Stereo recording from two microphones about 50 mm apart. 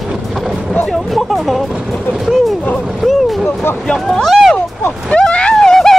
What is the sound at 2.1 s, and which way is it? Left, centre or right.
Vehicle, centre.